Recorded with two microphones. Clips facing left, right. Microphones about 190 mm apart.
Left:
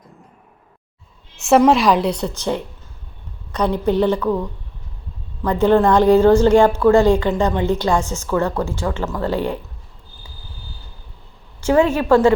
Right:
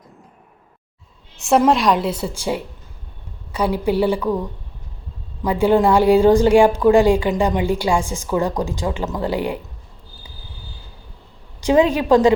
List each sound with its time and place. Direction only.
1.4 s a woman's voice: centre (ahead or behind)
11.6 s a woman's voice: 15° right (ahead or behind)